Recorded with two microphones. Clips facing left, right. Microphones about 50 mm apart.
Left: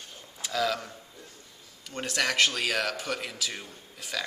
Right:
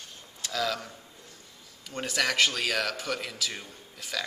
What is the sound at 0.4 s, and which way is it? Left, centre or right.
A man's voice, centre.